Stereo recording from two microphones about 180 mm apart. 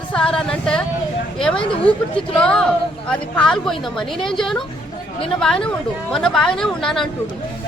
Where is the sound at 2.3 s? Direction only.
5° left (ahead or behind).